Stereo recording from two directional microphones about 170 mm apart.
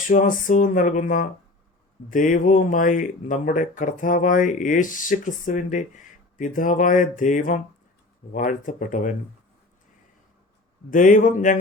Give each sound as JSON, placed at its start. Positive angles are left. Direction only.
{"t": 0.1, "sound": "speech", "side_deg": 50}
{"t": 10.9, "sound": "speech", "side_deg": 50}